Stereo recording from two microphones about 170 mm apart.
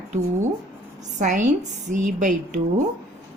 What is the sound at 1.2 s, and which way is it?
Speech, 45° right (ahead or behind).